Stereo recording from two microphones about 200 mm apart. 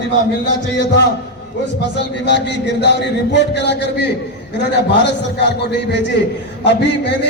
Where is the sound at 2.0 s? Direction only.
60° left (ahead or behind).